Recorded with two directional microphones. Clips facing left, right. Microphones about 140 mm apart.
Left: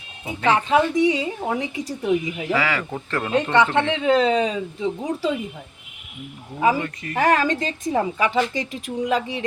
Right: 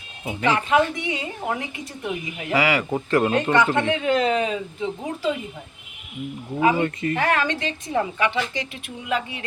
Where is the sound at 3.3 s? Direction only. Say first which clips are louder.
Left 1 dB; 30° left (ahead or behind).